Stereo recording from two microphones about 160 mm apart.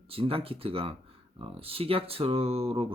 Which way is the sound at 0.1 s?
35° right (ahead or behind).